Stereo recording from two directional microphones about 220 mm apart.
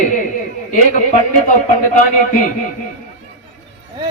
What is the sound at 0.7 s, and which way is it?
A man's voice, 35° left (ahead or behind).